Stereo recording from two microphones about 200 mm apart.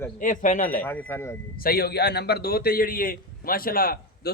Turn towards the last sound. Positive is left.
turn(degrees=45)  # may be behind; listen again after turning